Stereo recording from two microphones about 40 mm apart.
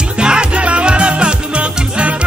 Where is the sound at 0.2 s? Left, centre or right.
Right.